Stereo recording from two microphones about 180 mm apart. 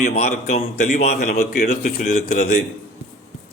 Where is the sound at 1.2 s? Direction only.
50° left (ahead or behind).